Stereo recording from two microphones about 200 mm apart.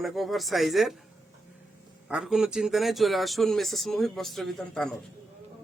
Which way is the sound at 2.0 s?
5° right (ahead or behind).